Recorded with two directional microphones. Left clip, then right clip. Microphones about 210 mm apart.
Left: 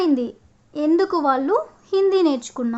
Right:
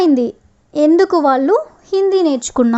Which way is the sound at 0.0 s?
30° right (ahead or behind).